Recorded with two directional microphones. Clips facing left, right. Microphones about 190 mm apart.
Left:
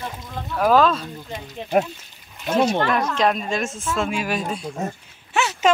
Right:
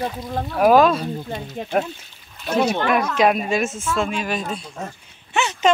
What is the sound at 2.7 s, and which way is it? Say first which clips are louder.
Speech: right 1 dB; 10° right (ahead or behind).